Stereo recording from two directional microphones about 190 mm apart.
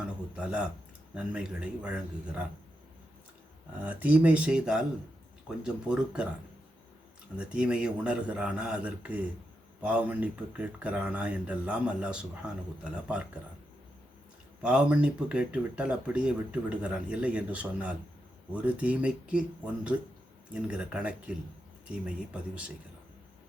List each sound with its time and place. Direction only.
0.0 s a man's voice: 5° right (ahead or behind)
3.8 s a man's voice: 5° right (ahead or behind)
7.3 s a man's voice: 5° right (ahead or behind)
14.6 s speech: 5° right (ahead or behind)
20.5 s speech: 5° right (ahead or behind)